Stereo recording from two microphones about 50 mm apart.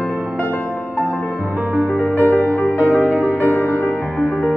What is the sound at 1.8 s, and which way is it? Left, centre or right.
Music, left.